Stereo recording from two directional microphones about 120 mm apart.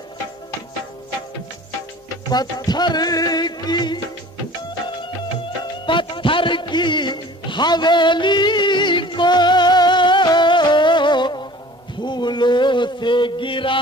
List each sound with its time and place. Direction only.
2.3 s music: 35° left (ahead or behind)
5.9 s music: 45° left (ahead or behind)
12.0 s a sound: 40° left (ahead or behind)